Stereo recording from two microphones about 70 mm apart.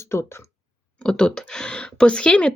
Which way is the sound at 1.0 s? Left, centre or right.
Centre.